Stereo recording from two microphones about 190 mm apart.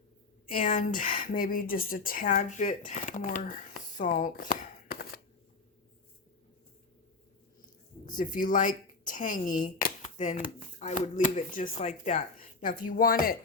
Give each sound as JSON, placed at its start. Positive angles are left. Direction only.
{"t": 0.5, "sound": "speech", "side_deg": 45}
{"t": 8.0, "sound": "speech", "side_deg": 45}